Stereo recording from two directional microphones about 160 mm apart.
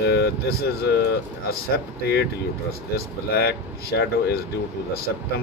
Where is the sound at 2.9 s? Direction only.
85° left.